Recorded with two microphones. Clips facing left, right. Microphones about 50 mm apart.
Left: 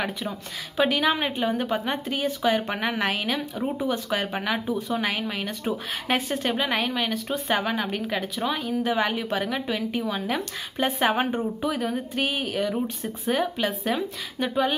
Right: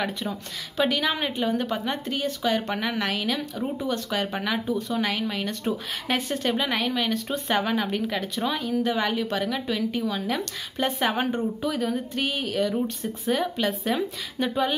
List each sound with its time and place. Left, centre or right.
0.7 s a woman's voice: centre